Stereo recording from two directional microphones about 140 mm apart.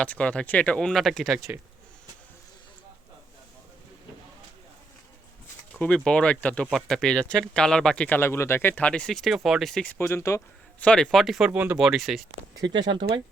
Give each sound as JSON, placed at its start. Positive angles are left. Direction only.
{"t": 0.0, "sound": "speech", "side_deg": 10}
{"t": 5.8, "sound": "speech", "side_deg": 5}
{"t": 10.0, "sound": "speech", "side_deg": 20}
{"t": 10.8, "sound": "speech", "side_deg": 5}
{"t": 11.8, "sound": "speech", "side_deg": 0}
{"t": 12.3, "sound": "speech", "side_deg": -30}